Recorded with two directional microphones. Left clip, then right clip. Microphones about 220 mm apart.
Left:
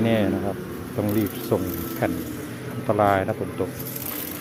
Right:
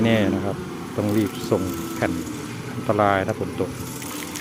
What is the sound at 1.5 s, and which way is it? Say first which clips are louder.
Speech: right 1 dB; 5° right (ahead or behind).